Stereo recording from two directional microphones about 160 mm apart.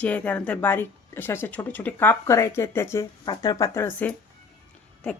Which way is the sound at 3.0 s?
25° left (ahead or behind).